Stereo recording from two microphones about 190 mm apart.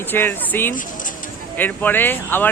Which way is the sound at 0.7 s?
45° left (ahead or behind).